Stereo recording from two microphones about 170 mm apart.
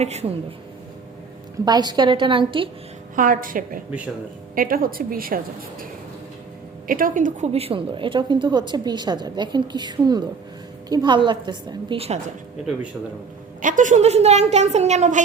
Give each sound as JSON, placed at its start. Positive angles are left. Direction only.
{"t": 0.0, "sound": "speech", "side_deg": -40}
{"t": 1.6, "sound": "a woman's voice", "side_deg": -25}
{"t": 3.2, "sound": "a woman's voice", "side_deg": -55}
{"t": 6.8, "sound": "a woman's voice", "side_deg": -55}
{"t": 13.6, "sound": "speech", "side_deg": -50}